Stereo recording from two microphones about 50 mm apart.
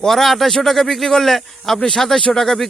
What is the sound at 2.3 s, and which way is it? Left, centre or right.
Speech, centre.